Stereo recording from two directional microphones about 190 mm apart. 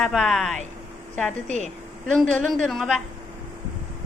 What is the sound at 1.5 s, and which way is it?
Speech, 40° right (ahead or behind).